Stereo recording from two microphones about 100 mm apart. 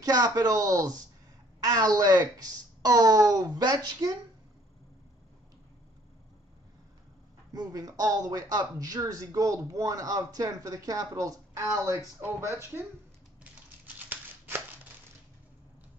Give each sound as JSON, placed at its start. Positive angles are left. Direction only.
{"t": 0.0, "sound": "speech", "side_deg": -40}
{"t": 7.5, "sound": "speech", "side_deg": -40}
{"t": 13.9, "sound": "scissors", "side_deg": -15}